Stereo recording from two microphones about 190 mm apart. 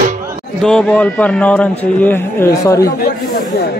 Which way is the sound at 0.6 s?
5° left (ahead or behind).